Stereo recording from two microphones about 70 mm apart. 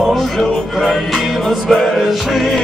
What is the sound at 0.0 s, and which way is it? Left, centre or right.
Music, centre.